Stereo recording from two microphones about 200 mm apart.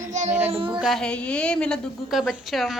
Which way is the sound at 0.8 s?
Centre (ahead or behind).